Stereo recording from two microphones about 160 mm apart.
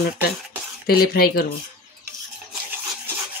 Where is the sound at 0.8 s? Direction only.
70° left (ahead or behind).